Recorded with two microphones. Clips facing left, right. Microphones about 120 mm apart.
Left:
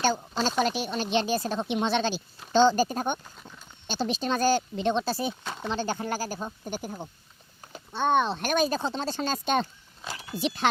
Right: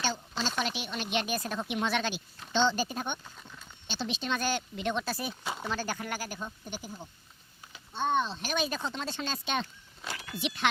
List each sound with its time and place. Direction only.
0.0 s speech: 45° left (ahead or behind); by 2.2 s 30° left (ahead or behind)
2.5 s speech: 40° left (ahead or behind)
5.4 s speech: 5° right (ahead or behind)
5.6 s speech: 25° left (ahead or behind); by 7.1 s 55° left (ahead or behind)
7.9 s speech: 70° left (ahead or behind); by 8.6 s 55° left (ahead or behind)
8.6 s speech: 35° left (ahead or behind)
10.1 s speech: 30° left (ahead or behind)